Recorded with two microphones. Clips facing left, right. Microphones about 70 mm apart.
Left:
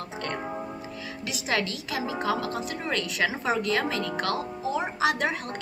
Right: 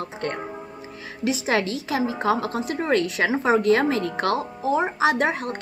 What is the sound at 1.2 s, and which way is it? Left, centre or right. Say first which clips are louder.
A woman's voice: right 6 dB; right.